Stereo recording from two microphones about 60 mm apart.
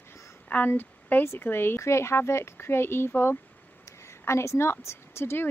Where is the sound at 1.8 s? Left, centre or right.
Left.